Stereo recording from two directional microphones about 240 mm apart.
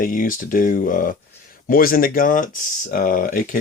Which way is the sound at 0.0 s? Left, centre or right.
Left.